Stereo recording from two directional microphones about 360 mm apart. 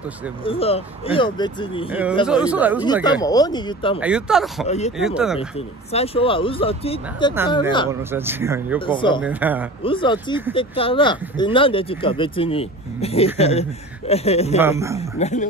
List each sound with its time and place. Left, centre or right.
0.4 s speech: centre
1.9 s speech: centre
2.8 s speech: centre
4.0 s speech: centre
4.6 s speech: centre
4.9 s speech: centre
5.9 s speech: centre
7.9 s speech: centre
8.7 s speech: centre
9.2 s speech: centre
9.8 s speech: centre
14.6 s speech: centre
15.0 s a man's voice: centre